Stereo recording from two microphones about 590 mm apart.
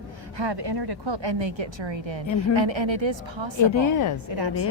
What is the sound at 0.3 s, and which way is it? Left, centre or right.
A woman's voice, right.